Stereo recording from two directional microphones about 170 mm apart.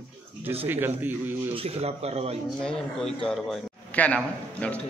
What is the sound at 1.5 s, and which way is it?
Speech, 35° right (ahead or behind).